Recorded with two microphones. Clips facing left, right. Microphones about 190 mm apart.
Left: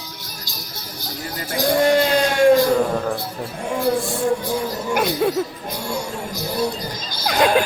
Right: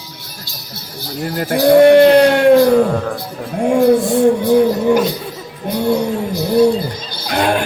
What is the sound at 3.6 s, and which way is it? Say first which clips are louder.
Speech: right 12 dB; 55° right (ahead or behind).